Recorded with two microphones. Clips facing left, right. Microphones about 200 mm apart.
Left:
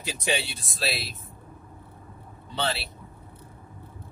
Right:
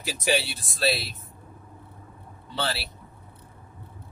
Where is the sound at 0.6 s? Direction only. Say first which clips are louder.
Right 5 dB; centre (ahead or behind).